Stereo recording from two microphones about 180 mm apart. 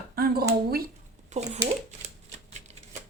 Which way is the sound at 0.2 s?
60° right (ahead or behind).